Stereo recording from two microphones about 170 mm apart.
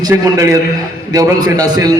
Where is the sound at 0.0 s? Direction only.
20° right (ahead or behind).